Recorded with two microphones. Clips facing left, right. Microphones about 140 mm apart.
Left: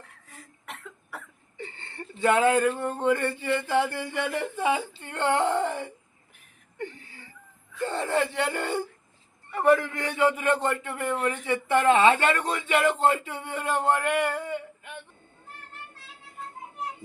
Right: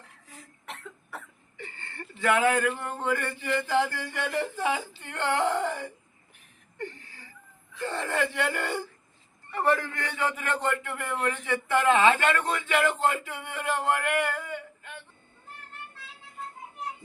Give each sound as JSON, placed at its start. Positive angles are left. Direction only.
{"t": 0.3, "sound": "cough", "side_deg": 0}
{"t": 1.5, "sound": "a sound", "side_deg": 25}
{"t": 3.1, "sound": "a man's voice", "side_deg": 25}
{"t": 6.7, "sound": "whimper", "side_deg": 20}
{"t": 7.9, "sound": "a man's voice", "side_deg": 25}